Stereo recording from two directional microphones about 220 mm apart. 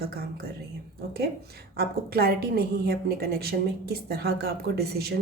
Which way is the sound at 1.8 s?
45° right (ahead or behind).